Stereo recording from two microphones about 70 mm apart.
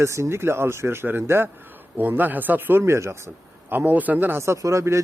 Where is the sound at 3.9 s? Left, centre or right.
Right.